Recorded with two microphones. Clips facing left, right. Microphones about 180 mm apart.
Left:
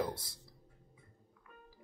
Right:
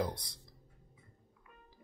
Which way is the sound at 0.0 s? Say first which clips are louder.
Right 1 dB; 5° left (ahead or behind).